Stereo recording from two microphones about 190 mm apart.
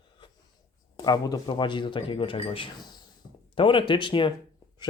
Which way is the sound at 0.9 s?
20° left (ahead or behind).